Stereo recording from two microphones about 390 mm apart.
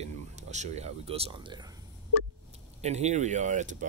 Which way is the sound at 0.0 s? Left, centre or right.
Centre.